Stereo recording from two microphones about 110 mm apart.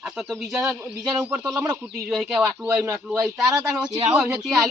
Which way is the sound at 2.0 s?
5° right (ahead or behind).